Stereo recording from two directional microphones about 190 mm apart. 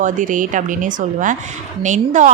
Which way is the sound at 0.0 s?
45° right (ahead or behind).